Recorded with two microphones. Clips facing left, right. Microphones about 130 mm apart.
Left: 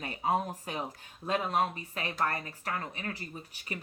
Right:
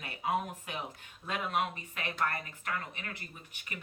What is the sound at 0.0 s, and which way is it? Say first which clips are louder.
Speech: left 3 dB; 35° left (ahead or behind).